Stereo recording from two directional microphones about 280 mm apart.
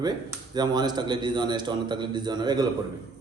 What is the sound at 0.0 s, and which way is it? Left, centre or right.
A man's voice, centre.